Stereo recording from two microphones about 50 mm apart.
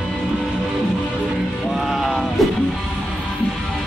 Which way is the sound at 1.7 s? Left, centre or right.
Centre.